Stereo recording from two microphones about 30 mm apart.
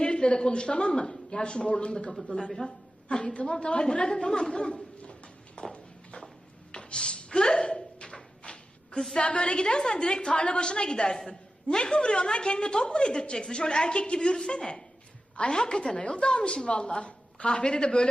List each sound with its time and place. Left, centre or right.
0.0 s a woman's voice: left
2.6 s a sound: left
3.3 s a woman's voice: left
5.7 s walk: left
6.7 s a sound: left
9.1 s a woman's voice: left
10.3 s a woman's voice: left
11.2 s a sound: left
11.8 s a woman's voice: left